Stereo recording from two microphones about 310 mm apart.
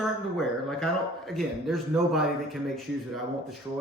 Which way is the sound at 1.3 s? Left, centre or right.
Centre.